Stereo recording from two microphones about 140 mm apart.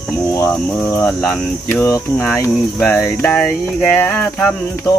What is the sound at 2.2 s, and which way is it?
Cricket, 20° left (ahead or behind).